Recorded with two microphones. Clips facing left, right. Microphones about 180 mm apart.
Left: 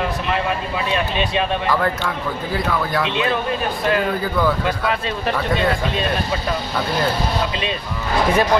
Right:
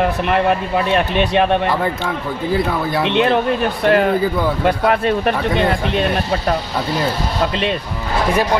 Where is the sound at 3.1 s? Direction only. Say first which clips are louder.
Right 6 dB; 65° right (ahead or behind).